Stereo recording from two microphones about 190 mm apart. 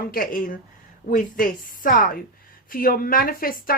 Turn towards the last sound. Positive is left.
turn(degrees=50)  # may be behind; listen again after turning